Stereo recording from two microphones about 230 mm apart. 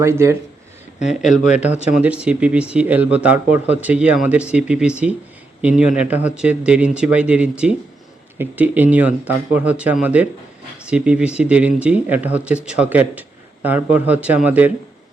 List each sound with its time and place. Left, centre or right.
0.0 s a man's voice: centre
0.9 s speech: left
1.5 s a man's voice: centre